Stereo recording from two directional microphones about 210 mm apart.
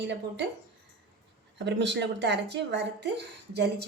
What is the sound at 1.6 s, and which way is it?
A woman's voice, 55° right (ahead or behind).